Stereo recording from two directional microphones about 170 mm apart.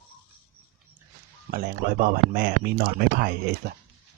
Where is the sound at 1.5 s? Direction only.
60° right (ahead or behind).